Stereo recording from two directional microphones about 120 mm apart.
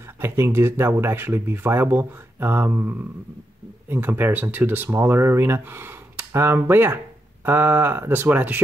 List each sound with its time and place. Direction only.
0.2 s speech: 20° right (ahead or behind)